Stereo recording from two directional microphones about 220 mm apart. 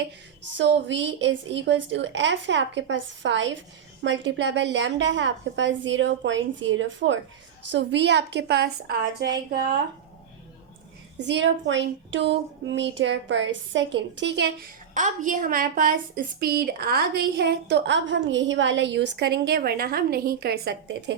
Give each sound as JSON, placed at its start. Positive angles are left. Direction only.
{"t": 0.4, "sound": "a woman's voice", "side_deg": -55}
{"t": 11.2, "sound": "speech", "side_deg": -55}
{"t": 14.9, "sound": "a woman's voice", "side_deg": -35}